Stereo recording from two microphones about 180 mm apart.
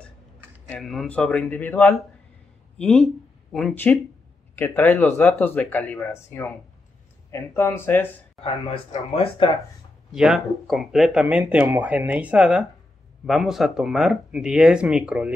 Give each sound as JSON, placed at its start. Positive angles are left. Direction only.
{"t": 0.7, "sound": "speech", "side_deg": 0}
{"t": 4.6, "sound": "speech", "side_deg": 10}
{"t": 8.5, "sound": "speech", "side_deg": 35}
{"t": 10.1, "sound": "speech", "side_deg": 0}